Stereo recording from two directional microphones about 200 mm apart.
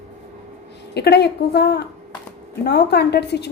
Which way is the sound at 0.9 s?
55° left (ahead or behind).